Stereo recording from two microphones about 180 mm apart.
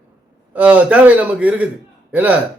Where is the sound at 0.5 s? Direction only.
5° right (ahead or behind).